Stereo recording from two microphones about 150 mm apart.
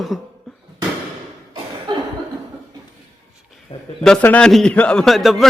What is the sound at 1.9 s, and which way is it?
Laughter, 30° right (ahead or behind).